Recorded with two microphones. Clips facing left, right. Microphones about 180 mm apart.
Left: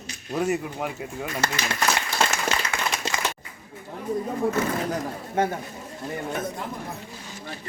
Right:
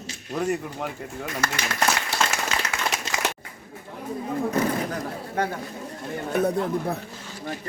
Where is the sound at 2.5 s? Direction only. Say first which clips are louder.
Even; 5° right (ahead or behind).